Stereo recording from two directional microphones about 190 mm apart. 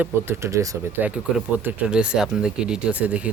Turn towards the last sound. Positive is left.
turn(degrees=-5)  # may be behind; listen again after turning